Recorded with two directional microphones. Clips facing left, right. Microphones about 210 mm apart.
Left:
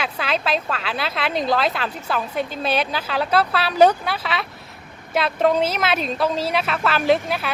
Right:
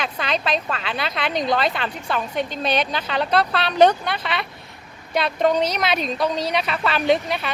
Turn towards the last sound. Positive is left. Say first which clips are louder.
# left 1 dB
turn(degrees=5)  # may be behind; listen again after turning